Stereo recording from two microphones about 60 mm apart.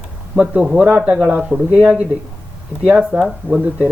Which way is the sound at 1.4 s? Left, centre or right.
Centre.